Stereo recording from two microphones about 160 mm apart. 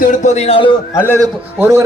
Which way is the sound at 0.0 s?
50° left (ahead or behind).